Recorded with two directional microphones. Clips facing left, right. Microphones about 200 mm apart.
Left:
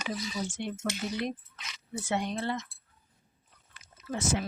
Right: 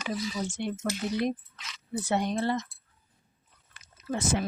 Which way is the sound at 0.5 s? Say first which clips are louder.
Right 3 dB; 40° right (ahead or behind).